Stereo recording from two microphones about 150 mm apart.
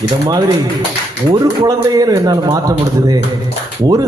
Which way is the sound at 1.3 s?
30° right (ahead or behind).